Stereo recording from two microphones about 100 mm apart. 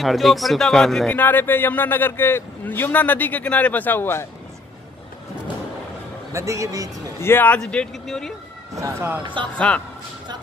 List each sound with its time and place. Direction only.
0.0 s speech: centre (ahead or behind)
1.1 s a man's voice: 20° left (ahead or behind)
6.3 s a man's voice: 30° right (ahead or behind)
7.2 s a man's voice: 20° left (ahead or behind)
7.6 s speech: 5° left (ahead or behind)
8.7 s speech: 25° right (ahead or behind)
9.2 s speech: 55° right (ahead or behind)